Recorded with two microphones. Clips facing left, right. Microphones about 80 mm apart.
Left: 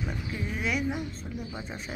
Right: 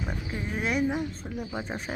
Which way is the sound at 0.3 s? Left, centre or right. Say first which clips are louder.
Right 2 dB; right.